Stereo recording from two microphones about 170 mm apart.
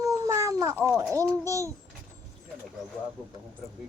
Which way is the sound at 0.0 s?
20° right (ahead or behind).